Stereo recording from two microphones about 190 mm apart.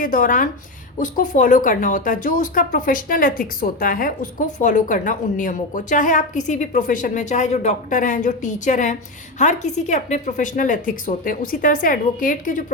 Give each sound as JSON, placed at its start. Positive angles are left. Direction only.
{"t": 0.0, "sound": "speech", "side_deg": 45}